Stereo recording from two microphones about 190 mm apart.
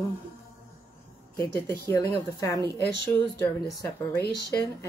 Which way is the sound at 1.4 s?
15° left (ahead or behind).